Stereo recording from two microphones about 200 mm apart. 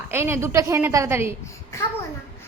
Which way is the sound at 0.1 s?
10° right (ahead or behind).